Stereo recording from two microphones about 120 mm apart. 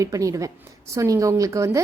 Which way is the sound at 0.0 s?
30° right (ahead or behind).